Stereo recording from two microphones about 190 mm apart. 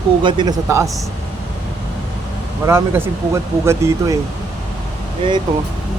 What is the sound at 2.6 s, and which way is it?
Speech, 15° right (ahead or behind).